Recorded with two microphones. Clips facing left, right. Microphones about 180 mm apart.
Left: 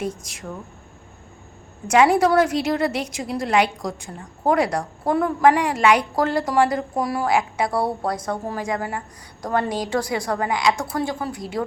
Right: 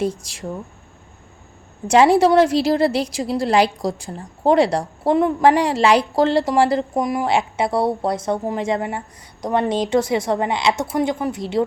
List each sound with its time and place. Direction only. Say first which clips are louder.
0.0 s speech: right 5 dB; 30° right (ahead or behind)
1.9 s a woman's voice: right 3 dB; 30° right (ahead or behind)